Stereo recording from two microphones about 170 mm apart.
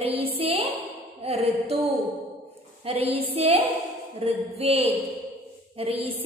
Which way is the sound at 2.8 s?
35° right (ahead or behind).